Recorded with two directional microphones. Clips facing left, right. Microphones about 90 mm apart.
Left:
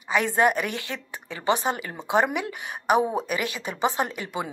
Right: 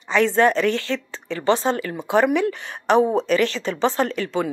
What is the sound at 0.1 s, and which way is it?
Speech, 15° left (ahead or behind).